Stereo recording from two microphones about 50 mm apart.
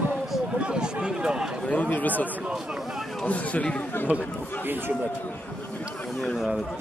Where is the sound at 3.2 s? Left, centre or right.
Left.